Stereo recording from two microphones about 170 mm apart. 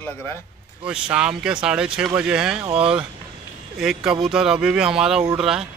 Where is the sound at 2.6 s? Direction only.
30° right (ahead or behind).